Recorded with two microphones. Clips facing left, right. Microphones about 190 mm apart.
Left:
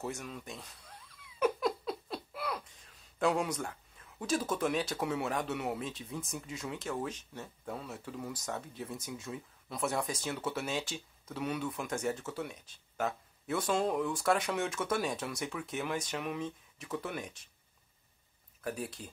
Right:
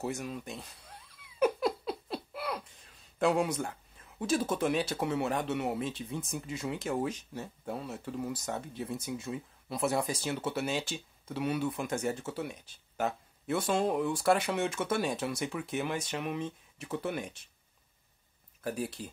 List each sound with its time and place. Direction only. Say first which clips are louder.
0.0 s speech: right 4 dB; 10° right (ahead or behind)
1.4 s a sound: right 2 dB; 5° right (ahead or behind)
3.2 s speech: right 3 dB; 5° right (ahead or behind)
7.3 s speech: right 4 dB; 5° right (ahead or behind)
18.6 s speech: right 3 dB; centre (ahead or behind)